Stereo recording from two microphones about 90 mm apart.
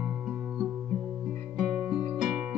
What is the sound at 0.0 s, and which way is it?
Music, 15° right (ahead or behind).